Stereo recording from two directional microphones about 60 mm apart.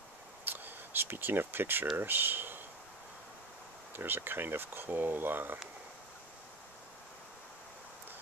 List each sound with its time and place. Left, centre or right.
0.5 s a sound: right
2.0 s speech: right
3.9 s speech: right